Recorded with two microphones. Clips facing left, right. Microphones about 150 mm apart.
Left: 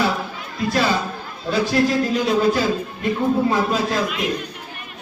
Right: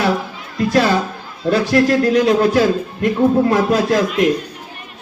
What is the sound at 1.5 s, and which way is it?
A man's voice, 75° right (ahead or behind).